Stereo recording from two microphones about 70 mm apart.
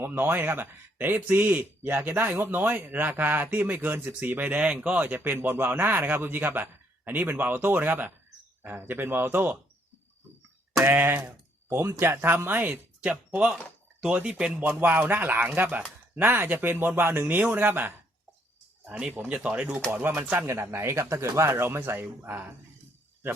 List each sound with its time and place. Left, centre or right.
0.0 s a man's voice: right
10.8 s a man's voice: right
18.9 s a man's voice: centre
20.5 s a man's voice: right